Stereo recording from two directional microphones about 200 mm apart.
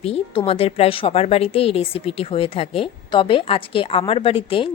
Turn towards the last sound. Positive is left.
turn(degrees=25)  # may be behind; listen again after turning